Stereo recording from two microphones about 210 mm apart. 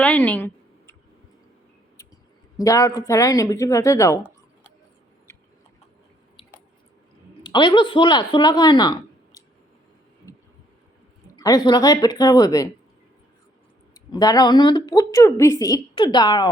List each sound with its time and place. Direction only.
0.0 s a sound: 5° left (ahead or behind)
2.6 s a woman's voice: 15° left (ahead or behind)
7.4 s speech: 20° left (ahead or behind)
11.3 s a woman's voice: 20° left (ahead or behind)
13.9 s a woman's voice: 20° left (ahead or behind)